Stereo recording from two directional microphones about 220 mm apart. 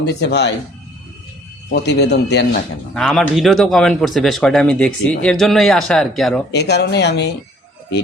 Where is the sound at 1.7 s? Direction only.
50° left (ahead or behind).